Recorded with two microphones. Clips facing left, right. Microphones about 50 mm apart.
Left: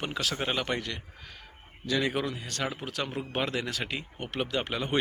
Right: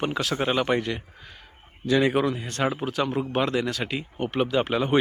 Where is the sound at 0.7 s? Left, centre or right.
Right.